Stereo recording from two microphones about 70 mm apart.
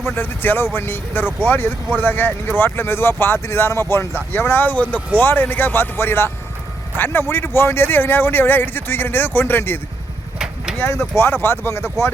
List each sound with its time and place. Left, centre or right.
0.0 s a man's voice: left
10.3 s vehicle: centre
10.8 s a man's voice: left